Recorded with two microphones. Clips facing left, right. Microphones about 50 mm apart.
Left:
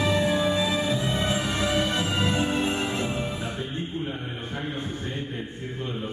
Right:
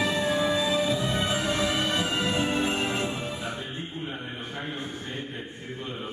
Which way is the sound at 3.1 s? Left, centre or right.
Centre.